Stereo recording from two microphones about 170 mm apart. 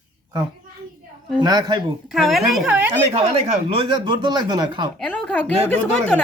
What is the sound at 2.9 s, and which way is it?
Speech, 35° right (ahead or behind).